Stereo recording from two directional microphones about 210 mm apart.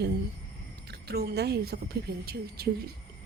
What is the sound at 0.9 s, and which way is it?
A woman's voice, 50° right (ahead or behind).